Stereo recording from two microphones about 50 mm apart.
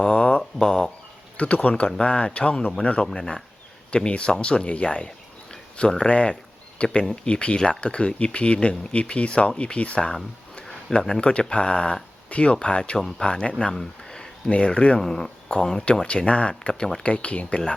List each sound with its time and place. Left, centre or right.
0.0 s a sound: centre
1.4 s speech: left; by 3.4 s centre
3.9 s speech: left
11.2 s speech: centre
13.0 s speech: centre
13.2 s speech: centre
14.9 s speech: centre
16.0 s speech: left